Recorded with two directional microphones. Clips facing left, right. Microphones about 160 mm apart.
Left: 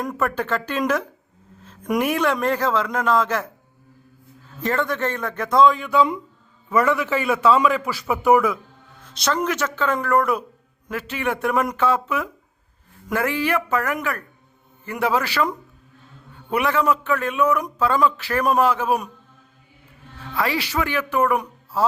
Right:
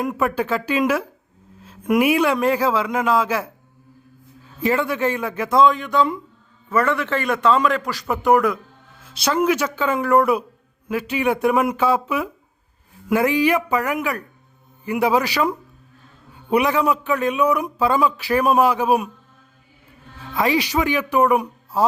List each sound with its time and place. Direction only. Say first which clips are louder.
0.0 s a man's voice: right 3 dB; 10° right (ahead or behind)
4.6 s a man's voice: right 3 dB; 10° right (ahead or behind)
20.1 s a man's voice: right 4 dB; 20° right (ahead or behind)